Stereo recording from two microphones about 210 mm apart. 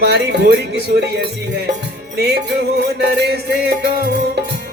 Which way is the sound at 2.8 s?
55° right (ahead or behind).